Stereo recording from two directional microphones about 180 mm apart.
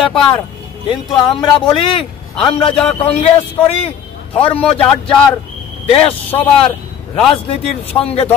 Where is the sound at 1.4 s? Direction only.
30° left (ahead or behind).